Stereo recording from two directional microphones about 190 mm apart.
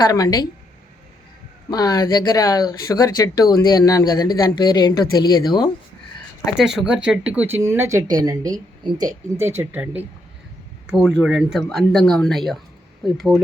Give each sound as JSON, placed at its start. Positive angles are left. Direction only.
{"t": 0.0, "sound": "speech", "side_deg": 20}
{"t": 1.7, "sound": "speech", "side_deg": 20}
{"t": 6.6, "sound": "speech", "side_deg": 0}